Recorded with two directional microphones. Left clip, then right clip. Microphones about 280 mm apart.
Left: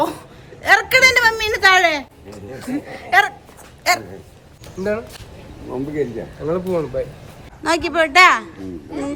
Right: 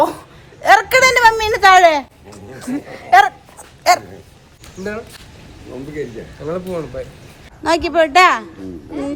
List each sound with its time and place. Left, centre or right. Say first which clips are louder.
0.6 s a sound: right 2 dB; centre
2.6 s speech: right 7 dB; centre
4.8 s speech: left 4 dB; centre
6.4 s speech: left 2 dB; centre
7.6 s speech: right 3 dB; centre